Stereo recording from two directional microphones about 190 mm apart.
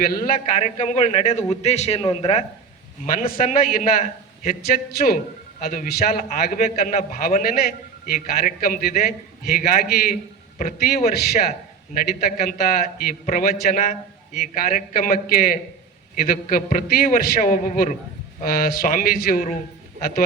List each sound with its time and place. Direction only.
0.3 s a man's voice: 35° left (ahead or behind)
3.3 s a man's voice: 50° left (ahead or behind)
10.6 s a man's voice: 40° left (ahead or behind)
11.1 s a man's voice: 55° left (ahead or behind)